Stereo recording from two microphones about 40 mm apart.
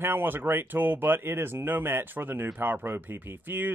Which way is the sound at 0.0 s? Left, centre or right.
Right.